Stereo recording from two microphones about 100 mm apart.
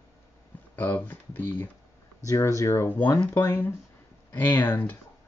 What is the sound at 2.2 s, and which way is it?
Speech, 30° left (ahead or behind).